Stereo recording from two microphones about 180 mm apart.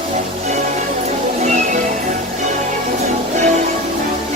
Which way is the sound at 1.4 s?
40° right (ahead or behind).